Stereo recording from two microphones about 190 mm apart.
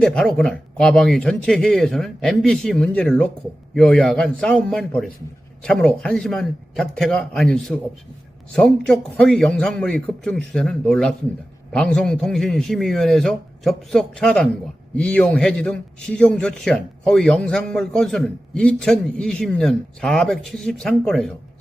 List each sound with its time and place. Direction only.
0.0 s a man's voice: 5° left (ahead or behind)